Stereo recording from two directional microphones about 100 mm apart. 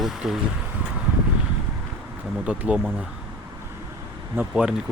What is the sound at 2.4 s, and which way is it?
Speech, 15° right (ahead or behind).